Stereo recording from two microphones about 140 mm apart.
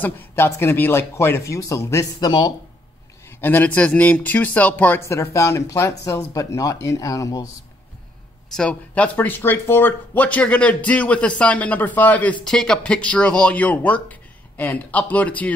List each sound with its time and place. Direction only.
0.4 s a man's voice: 15° left (ahead or behind)
3.3 s a man's voice: 15° left (ahead or behind)
8.5 s speech: 10° left (ahead or behind)